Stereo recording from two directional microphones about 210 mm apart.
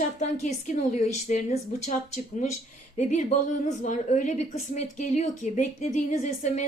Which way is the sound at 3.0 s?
35° left (ahead or behind).